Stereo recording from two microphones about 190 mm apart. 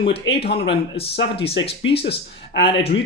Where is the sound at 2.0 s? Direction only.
60° left (ahead or behind).